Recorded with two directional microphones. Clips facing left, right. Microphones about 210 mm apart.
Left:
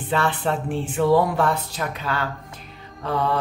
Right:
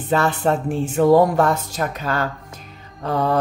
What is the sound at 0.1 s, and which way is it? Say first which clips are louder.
Speech: right 4 dB; 40° right (ahead or behind).